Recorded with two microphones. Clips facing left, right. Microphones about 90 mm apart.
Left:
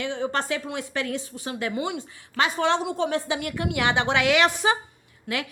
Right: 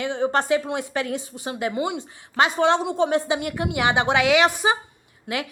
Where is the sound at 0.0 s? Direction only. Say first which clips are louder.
Right 4 dB; 20° right (ahead or behind).